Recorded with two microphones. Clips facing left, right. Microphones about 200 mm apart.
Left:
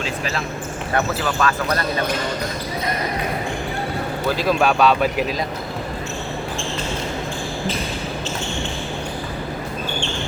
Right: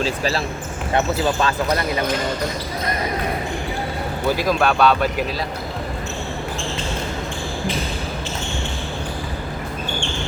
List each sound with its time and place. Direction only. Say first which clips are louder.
0.0 s speech: right 4 dB; 35° right (ahead or behind)
4.4 s speech: left 1 dB; 10° left (ahead or behind)